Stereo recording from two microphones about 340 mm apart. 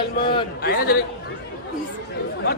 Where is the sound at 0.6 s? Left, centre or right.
Left.